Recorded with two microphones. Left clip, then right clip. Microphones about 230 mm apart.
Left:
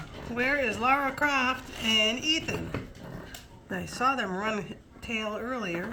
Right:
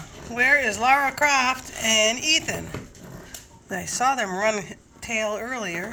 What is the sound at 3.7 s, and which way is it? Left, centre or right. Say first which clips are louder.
A child's voice: right 5 dB; centre.